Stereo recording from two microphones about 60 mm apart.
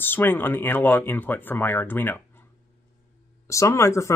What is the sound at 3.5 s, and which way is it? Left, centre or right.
Speech, left.